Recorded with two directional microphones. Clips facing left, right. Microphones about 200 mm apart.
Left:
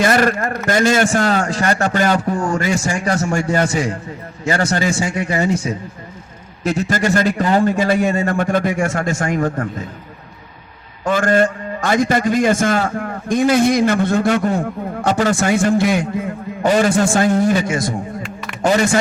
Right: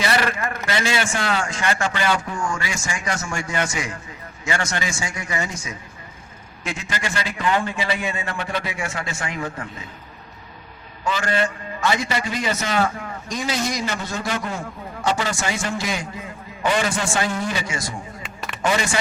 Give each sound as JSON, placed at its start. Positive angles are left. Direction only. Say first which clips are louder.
{"t": 0.0, "sound": "a man's voice", "louder": "left 7 dB", "side_deg": 45}
{"t": 6.7, "sound": "a man's voice", "louder": "left 12 dB", "side_deg": 40}
{"t": 11.0, "sound": "a man's voice", "louder": "left 8 dB", "side_deg": 50}
{"t": 16.6, "sound": "a man's voice", "louder": "left 8 dB", "side_deg": 45}
{"t": 18.6, "sound": "a man's voice", "louder": "left 7 dB", "side_deg": 40}